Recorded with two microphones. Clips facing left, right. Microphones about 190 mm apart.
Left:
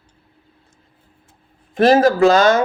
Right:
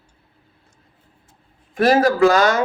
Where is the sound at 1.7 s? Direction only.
25° left (ahead or behind).